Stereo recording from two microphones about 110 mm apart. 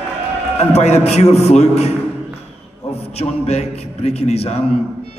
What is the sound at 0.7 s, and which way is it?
A man's voice, 80° left.